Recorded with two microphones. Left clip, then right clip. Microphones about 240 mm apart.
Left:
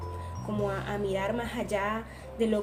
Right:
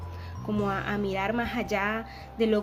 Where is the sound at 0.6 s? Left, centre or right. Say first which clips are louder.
Right 2 dB; right.